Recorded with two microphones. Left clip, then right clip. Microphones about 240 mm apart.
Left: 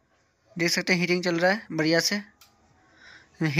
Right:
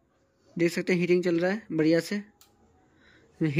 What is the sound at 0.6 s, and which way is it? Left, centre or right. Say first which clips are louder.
Speech: left 2 dB; centre.